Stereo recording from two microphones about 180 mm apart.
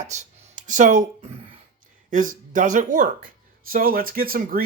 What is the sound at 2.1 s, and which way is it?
Speech, 45° right (ahead or behind).